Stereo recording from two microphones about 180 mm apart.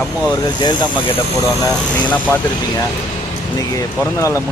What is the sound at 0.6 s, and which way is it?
Speech, 25° left (ahead or behind).